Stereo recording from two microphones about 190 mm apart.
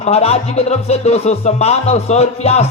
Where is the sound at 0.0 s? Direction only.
35° left (ahead or behind).